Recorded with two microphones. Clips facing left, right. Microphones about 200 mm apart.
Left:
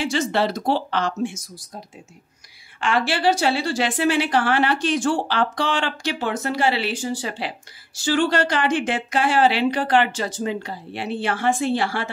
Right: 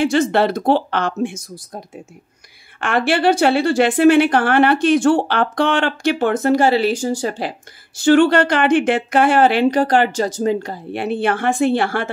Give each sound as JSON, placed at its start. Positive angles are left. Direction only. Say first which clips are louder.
{"t": 0.0, "sound": "a woman's voice", "louder": "right 6 dB", "side_deg": -55}
{"t": 2.8, "sound": "a woman's voice", "louder": "right 4 dB", "side_deg": -55}